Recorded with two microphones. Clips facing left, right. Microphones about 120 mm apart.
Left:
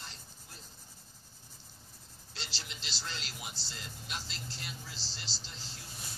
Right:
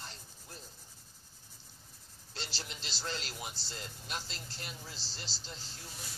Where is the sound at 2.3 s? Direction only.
50° right (ahead or behind).